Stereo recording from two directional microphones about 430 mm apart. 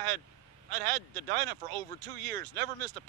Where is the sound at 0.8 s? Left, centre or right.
Right.